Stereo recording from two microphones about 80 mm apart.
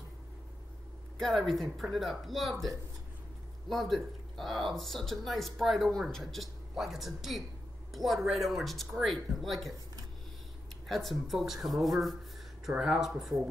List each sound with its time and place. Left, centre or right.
1.1 s speech: centre
10.9 s speech: centre